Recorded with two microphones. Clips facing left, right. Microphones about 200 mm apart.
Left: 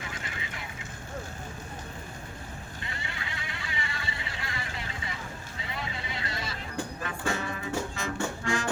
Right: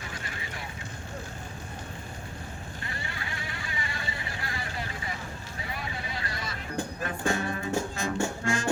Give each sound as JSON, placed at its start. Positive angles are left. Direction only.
{"t": 2.8, "sound": "vehicle", "side_deg": 20}
{"t": 5.5, "sound": "vehicle", "side_deg": 25}
{"t": 7.3, "sound": "music", "side_deg": -45}